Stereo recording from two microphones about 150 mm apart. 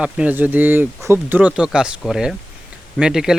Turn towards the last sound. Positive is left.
turn(degrees=-5)  # may be behind; listen again after turning